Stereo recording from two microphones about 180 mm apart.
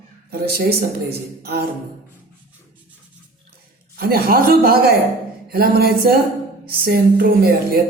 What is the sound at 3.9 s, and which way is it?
Speech, 60° right (ahead or behind).